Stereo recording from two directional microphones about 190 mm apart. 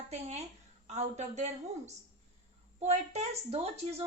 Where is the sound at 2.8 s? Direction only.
35° right (ahead or behind).